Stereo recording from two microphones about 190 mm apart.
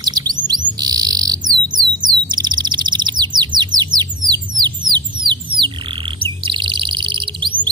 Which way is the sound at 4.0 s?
20° right (ahead or behind).